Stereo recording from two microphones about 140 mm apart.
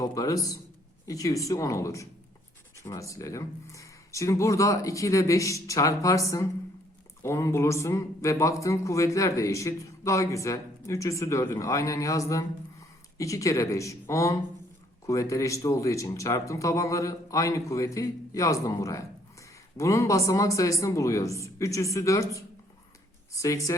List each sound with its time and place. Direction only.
0.0 s speech: 25° left (ahead or behind)